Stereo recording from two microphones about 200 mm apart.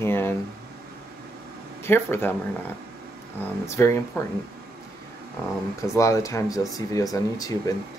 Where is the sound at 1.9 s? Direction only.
10° left (ahead or behind).